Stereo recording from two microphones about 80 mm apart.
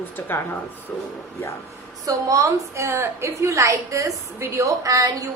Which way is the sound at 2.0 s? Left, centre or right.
Right.